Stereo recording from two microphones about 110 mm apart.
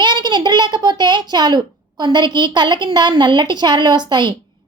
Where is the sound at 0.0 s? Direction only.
40° right (ahead or behind).